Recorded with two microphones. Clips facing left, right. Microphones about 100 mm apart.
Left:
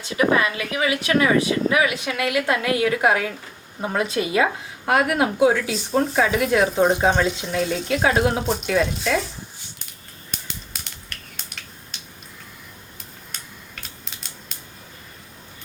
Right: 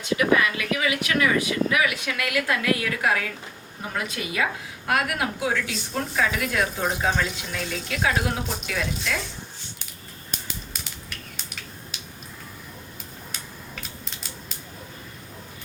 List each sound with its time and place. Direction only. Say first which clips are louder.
0.0 s speech: left 2 dB; 30° left (ahead or behind)
10.5 s a sound: right 1 dB; 5° right (ahead or behind)
13.3 s scissors: right 1 dB; centre (ahead or behind)